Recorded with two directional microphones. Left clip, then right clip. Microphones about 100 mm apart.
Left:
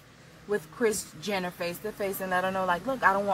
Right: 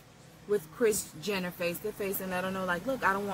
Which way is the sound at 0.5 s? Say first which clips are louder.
Even; 15° left (ahead or behind).